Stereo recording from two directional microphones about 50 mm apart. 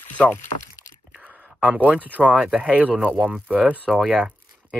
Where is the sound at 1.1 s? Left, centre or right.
Right.